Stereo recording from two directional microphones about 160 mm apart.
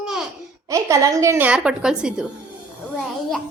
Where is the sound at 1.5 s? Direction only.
5° right (ahead or behind).